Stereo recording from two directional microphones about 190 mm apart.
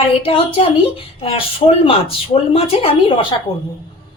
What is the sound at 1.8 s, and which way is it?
A man's voice, 30° left (ahead or behind).